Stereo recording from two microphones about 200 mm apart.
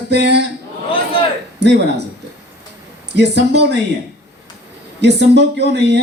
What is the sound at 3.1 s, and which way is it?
Speech, 60° right (ahead or behind).